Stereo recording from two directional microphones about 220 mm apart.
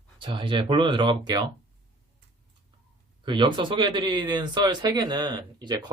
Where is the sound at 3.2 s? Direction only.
20° right (ahead or behind).